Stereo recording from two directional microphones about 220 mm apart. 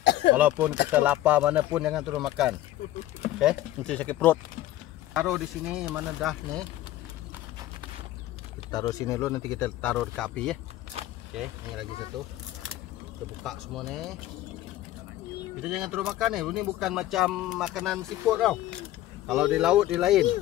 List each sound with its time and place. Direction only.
0.0 s a sound: 50° left (ahead or behind)
0.4 s speech: 10° right (ahead or behind)
8.7 s speech: 15° left (ahead or behind)
13.4 s speech: centre (ahead or behind)
15.6 s speech: 5° right (ahead or behind)